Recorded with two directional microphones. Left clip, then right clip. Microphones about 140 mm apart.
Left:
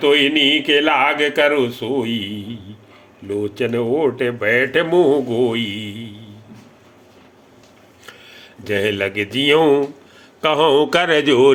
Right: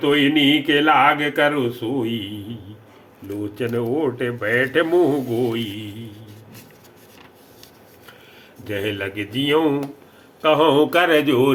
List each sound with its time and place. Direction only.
0.0 s speech: 40° left (ahead or behind)
8.0 s speech: 40° left (ahead or behind)
10.4 s mantra: 50° left (ahead or behind)